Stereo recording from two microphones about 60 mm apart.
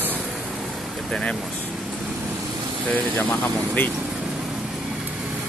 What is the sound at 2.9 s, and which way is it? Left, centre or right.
Speech, left.